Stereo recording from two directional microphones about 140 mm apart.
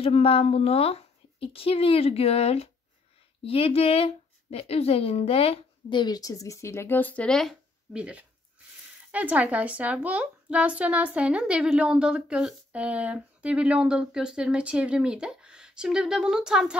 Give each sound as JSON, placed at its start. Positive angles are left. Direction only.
{"t": 0.0, "sound": "a woman's voice", "side_deg": 45}
{"t": 8.0, "sound": "speech", "side_deg": -10}